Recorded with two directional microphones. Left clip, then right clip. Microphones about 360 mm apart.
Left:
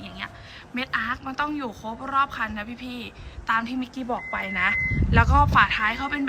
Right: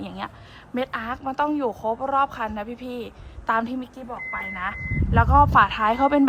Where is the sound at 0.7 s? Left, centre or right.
Centre.